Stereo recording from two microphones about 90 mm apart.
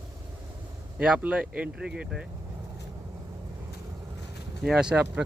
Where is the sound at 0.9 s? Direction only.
15° right (ahead or behind).